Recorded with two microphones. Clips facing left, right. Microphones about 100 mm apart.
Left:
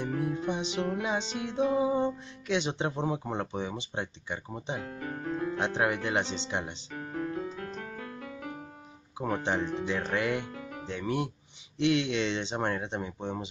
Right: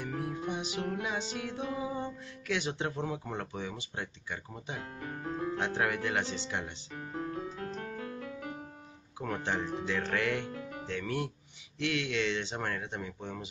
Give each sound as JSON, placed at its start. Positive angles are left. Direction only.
{"t": 0.0, "sound": "music", "side_deg": 25}
{"t": 5.0, "sound": "speech", "side_deg": 65}
{"t": 5.6, "sound": "music", "side_deg": 20}
{"t": 6.9, "sound": "music", "side_deg": 60}
{"t": 9.2, "sound": "music", "side_deg": 20}